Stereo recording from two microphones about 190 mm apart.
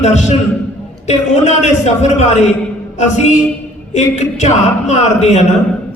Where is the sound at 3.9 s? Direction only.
35° left (ahead or behind).